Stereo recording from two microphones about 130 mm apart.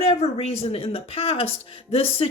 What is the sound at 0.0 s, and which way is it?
A woman's voice, 55° left (ahead or behind).